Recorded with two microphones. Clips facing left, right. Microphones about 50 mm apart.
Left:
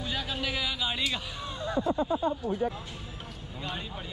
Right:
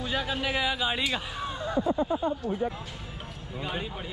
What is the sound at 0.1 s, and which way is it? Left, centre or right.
Speech, centre.